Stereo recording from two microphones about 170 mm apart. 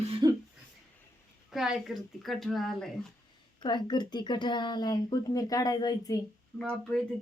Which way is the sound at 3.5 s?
25° left (ahead or behind).